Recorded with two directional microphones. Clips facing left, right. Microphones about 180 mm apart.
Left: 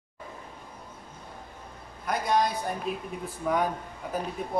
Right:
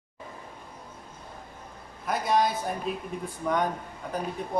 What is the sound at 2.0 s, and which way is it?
Speech, centre (ahead or behind).